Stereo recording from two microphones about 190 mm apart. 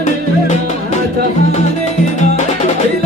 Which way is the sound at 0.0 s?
40° left (ahead or behind).